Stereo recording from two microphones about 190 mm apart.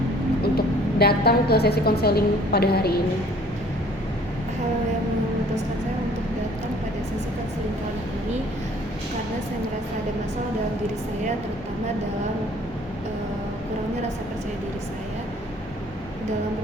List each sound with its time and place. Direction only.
0.4 s a woman's voice: 55° left (ahead or behind)